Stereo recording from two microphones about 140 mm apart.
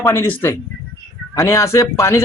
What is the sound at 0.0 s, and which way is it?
A man's voice, 15° left (ahead or behind).